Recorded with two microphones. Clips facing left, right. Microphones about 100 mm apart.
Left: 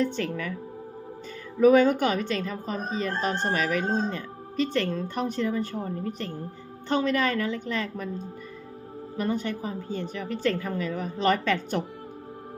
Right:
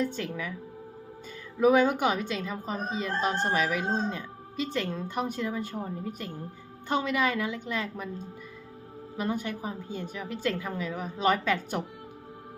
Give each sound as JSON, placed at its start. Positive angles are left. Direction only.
{"t": 0.0, "sound": "speech", "side_deg": -5}
{"t": 1.5, "sound": "a woman's voice", "side_deg": -5}
{"t": 9.2, "sound": "a woman's voice", "side_deg": -5}